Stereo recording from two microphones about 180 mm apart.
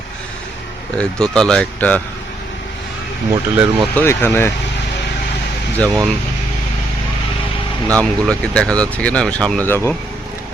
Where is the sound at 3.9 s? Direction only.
10° left (ahead or behind).